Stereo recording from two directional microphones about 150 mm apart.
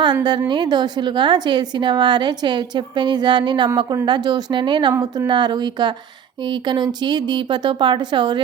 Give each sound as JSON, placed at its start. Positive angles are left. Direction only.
{"t": 0.0, "sound": "a woman's voice", "side_deg": -30}
{"t": 4.9, "sound": "a woman's voice", "side_deg": -15}
{"t": 5.3, "sound": "a woman's voice", "side_deg": -30}